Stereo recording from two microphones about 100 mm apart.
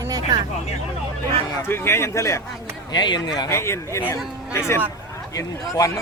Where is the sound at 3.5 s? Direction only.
25° left (ahead or behind).